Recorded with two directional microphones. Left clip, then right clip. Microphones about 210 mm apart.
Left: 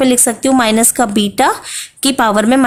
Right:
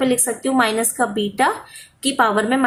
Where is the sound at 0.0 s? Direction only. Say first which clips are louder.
Left 7 dB; 55° left (ahead or behind).